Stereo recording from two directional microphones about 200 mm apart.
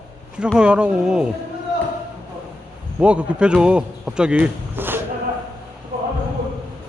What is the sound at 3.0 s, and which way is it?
Speech, 5° right (ahead or behind).